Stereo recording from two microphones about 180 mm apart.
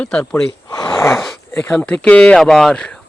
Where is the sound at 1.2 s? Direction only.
Centre (ahead or behind).